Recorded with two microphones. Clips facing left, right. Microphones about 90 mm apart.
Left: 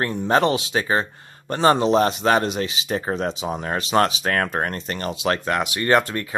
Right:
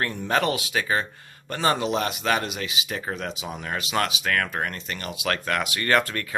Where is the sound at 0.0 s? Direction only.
25° left (ahead or behind).